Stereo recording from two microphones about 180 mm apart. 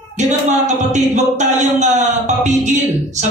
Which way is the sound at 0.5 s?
40° right (ahead or behind).